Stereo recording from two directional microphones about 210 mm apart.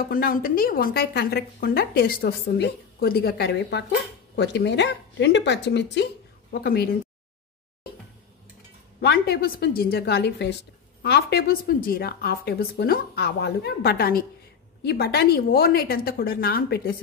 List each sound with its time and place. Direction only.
0.0 s a woman's voice: 45° left (ahead or behind)
9.0 s a woman's voice: 50° left (ahead or behind)